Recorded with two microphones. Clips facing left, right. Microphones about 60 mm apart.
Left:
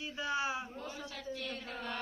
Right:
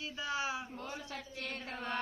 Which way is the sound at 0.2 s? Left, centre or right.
Centre.